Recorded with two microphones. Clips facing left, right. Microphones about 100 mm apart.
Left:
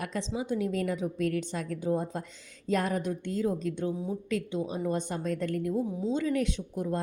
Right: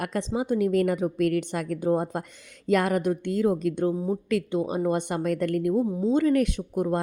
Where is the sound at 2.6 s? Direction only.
70° right (ahead or behind).